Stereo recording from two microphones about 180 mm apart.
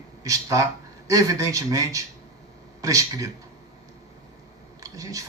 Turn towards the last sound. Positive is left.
turn(degrees=-20)  # may be behind; listen again after turning